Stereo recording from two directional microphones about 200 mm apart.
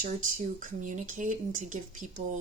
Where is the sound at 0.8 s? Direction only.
40° right (ahead or behind).